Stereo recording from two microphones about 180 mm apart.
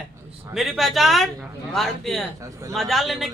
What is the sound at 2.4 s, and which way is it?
Speech, 15° right (ahead or behind).